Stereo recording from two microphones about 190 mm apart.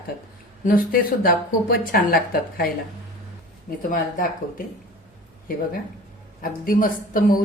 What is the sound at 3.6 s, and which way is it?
Speech, 45° left (ahead or behind).